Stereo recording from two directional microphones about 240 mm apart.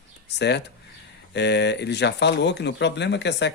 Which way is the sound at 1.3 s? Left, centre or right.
Left.